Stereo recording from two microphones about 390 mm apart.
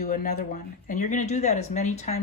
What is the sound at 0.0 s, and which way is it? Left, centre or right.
Speech, centre.